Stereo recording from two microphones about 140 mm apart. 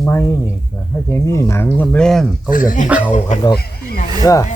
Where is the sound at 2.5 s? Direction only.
70° left (ahead or behind).